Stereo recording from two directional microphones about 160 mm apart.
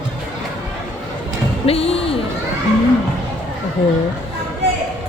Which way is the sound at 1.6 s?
40° left (ahead or behind).